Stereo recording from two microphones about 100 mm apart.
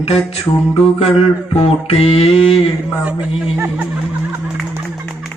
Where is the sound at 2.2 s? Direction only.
75° left (ahead or behind).